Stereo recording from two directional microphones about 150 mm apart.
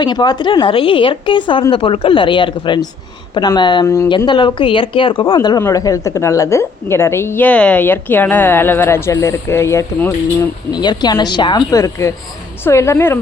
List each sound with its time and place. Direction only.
0.0 s speech: 30° left (ahead or behind)
3.8 s a woman's voice: 20° left (ahead or behind)
4.3 s a woman's voice: 30° left (ahead or behind)
10.7 s a woman's voice: 30° left (ahead or behind)